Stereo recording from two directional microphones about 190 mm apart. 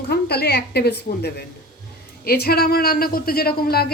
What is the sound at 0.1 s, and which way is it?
A woman's voice, 55° left (ahead or behind).